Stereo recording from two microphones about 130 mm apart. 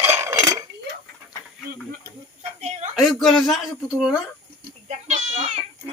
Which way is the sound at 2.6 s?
55° right (ahead or behind).